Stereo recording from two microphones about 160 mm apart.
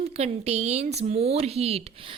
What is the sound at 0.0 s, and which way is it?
A woman's voice, 40° right (ahead or behind).